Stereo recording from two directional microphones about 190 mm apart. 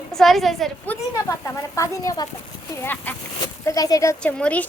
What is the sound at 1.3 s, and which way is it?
A woman's voice, 15° left (ahead or behind).